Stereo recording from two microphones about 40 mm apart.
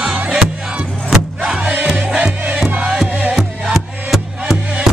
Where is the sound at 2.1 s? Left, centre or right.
Centre.